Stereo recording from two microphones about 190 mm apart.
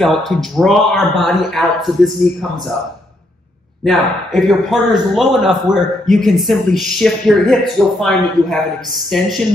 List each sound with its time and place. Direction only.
0.0 s speech: centre (ahead or behind)
3.8 s speech: centre (ahead or behind)